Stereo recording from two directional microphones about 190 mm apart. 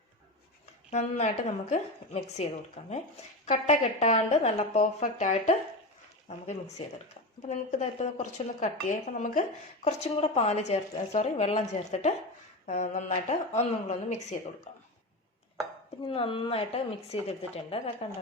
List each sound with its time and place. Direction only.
0.9 s a woman's voice: 35° left (ahead or behind)
16.0 s a woman's voice: 25° left (ahead or behind)